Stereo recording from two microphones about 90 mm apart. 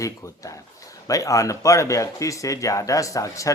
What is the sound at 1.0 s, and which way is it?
Speech, 40° left (ahead or behind).